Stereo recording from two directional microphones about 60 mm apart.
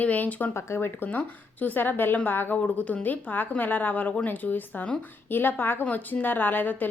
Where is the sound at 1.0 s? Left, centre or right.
Left.